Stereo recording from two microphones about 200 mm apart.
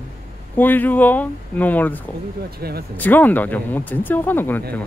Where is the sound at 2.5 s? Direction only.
50° right (ahead or behind).